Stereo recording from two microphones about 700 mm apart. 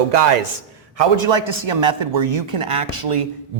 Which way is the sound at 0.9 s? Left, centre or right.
Right.